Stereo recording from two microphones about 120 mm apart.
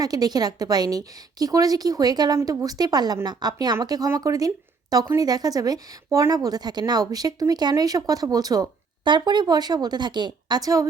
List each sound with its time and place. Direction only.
0.0 s speech: 30° right (ahead or behind)